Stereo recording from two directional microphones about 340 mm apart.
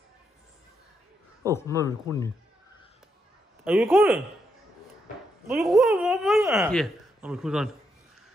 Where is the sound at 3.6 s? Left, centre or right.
Centre.